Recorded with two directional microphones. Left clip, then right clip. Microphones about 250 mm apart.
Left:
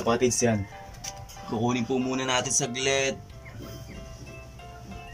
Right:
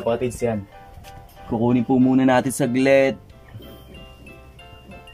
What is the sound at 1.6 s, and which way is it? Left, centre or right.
Speech, right.